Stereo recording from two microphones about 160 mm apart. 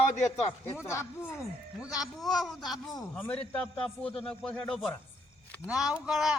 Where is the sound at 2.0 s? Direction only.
Centre (ahead or behind).